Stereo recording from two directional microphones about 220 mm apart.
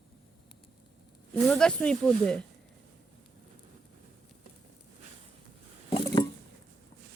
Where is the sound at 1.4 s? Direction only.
5° left (ahead or behind).